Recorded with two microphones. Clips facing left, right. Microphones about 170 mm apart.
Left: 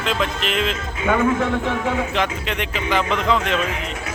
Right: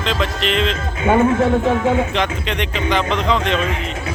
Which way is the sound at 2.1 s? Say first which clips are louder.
Right 2 dB; 5° left (ahead or behind).